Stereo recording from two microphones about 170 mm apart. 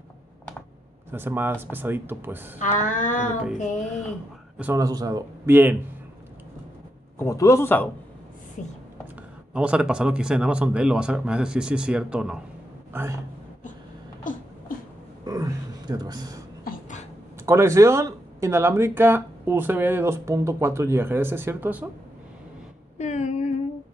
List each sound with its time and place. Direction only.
1.1 s speech: 10° right (ahead or behind)
2.6 s speech: 50° left (ahead or behind)
4.6 s speech: 10° right (ahead or behind)
4.8 s speech: 20° right (ahead or behind)
7.2 s speech: 15° left (ahead or behind)
8.6 s speech: 50° left (ahead or behind)
9.5 s speech: 5° right (ahead or behind)
12.9 s speech: 15° right (ahead or behind)
15.2 s a sound: 20° right (ahead or behind)
16.6 s a sound: 55° left (ahead or behind)
17.5 s speech: 15° right (ahead or behind)
22.9 s a sound: 45° left (ahead or behind)